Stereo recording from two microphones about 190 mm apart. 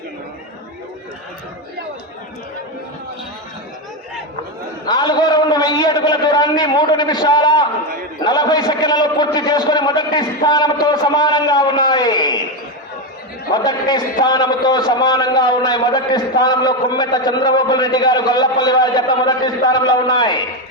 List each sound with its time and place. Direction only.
4.9 s a sound: 20° left (ahead or behind)
8.2 s a man's voice: 20° left (ahead or behind)
13.5 s a man's voice: 20° left (ahead or behind)